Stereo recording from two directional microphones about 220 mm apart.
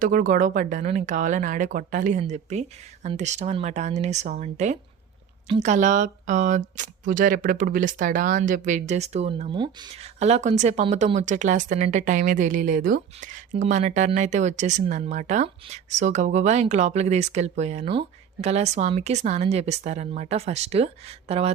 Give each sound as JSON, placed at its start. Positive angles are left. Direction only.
{"t": 0.0, "sound": "speech", "side_deg": -40}